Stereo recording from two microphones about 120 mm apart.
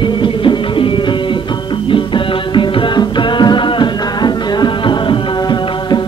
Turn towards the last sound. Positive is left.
turn(degrees=40)  # may be behind; listen again after turning